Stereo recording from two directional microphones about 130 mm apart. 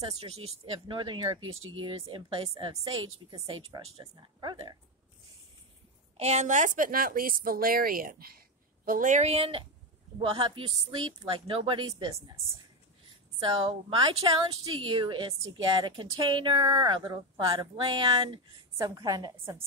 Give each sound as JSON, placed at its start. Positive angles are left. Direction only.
{"t": 0.2, "sound": "a woman's voice", "side_deg": -50}
{"t": 6.1, "sound": "a woman's voice", "side_deg": -60}
{"t": 13.4, "sound": "a woman's voice", "side_deg": -40}